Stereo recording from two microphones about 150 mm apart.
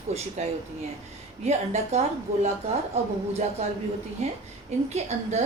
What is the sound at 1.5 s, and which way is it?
A woman's voice, 45° right (ahead or behind).